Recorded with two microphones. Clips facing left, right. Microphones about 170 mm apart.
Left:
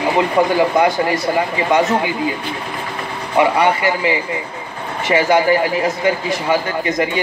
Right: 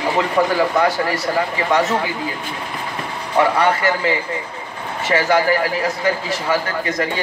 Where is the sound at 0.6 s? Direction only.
20° left (ahead or behind).